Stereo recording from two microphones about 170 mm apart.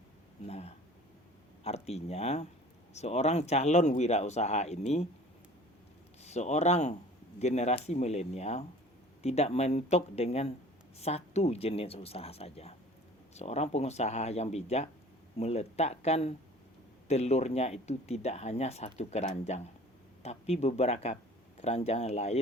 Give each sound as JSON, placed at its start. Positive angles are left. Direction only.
{"t": 0.4, "sound": "speech", "side_deg": 40}
{"t": 6.2, "sound": "speech", "side_deg": 40}